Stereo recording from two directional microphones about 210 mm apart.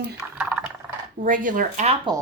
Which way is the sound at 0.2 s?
5° right (ahead or behind).